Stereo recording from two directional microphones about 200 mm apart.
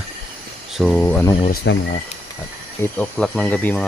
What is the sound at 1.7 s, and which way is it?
Speech, 65° left (ahead or behind).